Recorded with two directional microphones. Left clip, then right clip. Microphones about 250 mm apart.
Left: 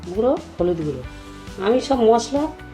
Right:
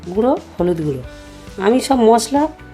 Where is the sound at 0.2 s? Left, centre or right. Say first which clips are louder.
Right 3 dB; right.